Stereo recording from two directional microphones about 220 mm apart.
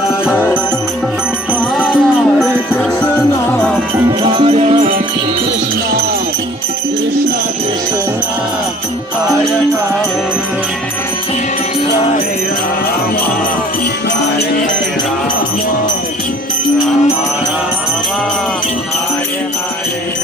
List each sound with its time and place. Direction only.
1.8 s music: 5° left (ahead or behind)
4.2 s music: 25° right (ahead or behind)